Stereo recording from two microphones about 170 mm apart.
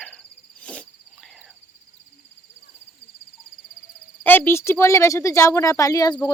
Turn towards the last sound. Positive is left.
turn(degrees=25)  # may be behind; listen again after turning